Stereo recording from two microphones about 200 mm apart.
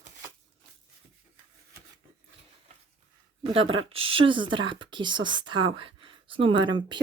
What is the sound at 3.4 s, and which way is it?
Speech, 25° right (ahead or behind).